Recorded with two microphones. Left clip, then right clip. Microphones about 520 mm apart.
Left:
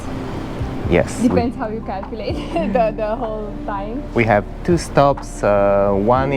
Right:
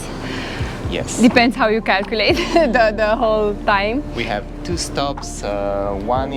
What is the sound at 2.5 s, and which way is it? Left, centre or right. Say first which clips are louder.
Speech: even; centre.